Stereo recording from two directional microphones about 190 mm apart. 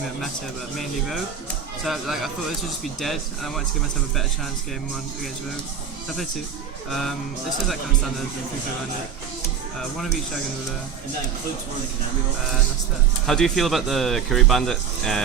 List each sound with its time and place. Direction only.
0.8 s speech: centre (ahead or behind)
13.2 s speech: centre (ahead or behind)